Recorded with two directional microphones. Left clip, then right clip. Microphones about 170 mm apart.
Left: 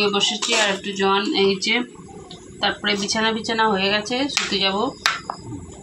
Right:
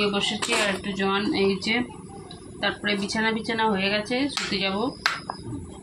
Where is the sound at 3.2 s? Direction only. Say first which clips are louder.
Left 4 dB; 20° right (ahead or behind).